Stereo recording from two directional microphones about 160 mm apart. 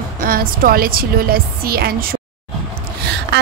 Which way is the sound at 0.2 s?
65° right (ahead or behind).